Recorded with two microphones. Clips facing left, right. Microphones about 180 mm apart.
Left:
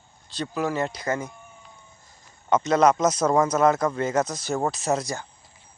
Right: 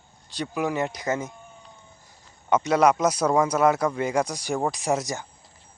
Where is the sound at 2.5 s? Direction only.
10° right (ahead or behind).